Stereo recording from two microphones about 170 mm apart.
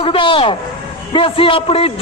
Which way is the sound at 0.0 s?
30° left (ahead or behind).